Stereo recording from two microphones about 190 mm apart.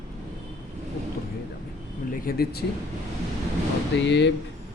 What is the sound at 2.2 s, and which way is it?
Speech, 55° left (ahead or behind).